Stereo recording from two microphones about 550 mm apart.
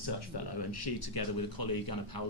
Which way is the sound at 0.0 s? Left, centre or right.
Left.